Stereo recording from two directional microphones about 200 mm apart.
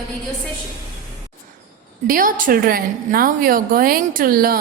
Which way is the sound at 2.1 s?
45° right (ahead or behind).